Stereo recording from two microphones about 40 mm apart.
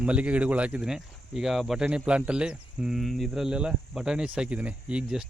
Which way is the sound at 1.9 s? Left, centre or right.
Right.